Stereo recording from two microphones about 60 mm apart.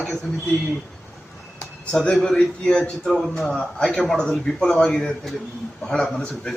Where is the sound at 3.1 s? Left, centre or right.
Centre.